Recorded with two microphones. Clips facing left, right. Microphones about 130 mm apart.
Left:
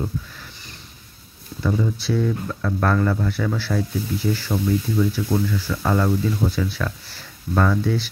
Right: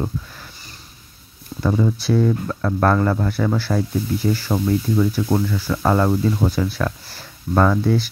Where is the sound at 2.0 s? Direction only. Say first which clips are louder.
Right 4 dB; 45° right (ahead or behind).